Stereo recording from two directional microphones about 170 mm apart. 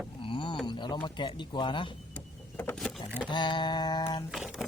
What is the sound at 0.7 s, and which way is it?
Speech, 25° left (ahead or behind).